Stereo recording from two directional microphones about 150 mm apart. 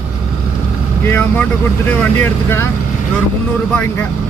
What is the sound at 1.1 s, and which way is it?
Vehicle, 10° left (ahead or behind).